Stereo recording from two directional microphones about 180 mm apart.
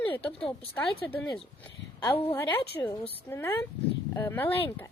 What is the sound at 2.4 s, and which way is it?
A woman's voice, 10° left (ahead or behind).